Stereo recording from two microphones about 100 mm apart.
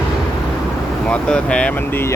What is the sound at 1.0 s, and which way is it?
Speech, 10° left (ahead or behind).